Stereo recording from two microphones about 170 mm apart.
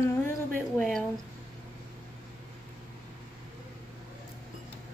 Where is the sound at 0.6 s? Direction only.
5° left (ahead or behind).